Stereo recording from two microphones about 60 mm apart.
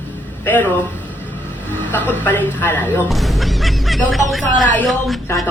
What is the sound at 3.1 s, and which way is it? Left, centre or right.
Music, centre.